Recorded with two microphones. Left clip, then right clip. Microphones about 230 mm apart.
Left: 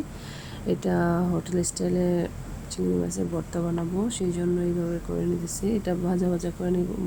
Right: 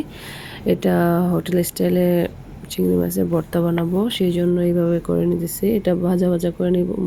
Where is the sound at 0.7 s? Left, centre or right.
Centre.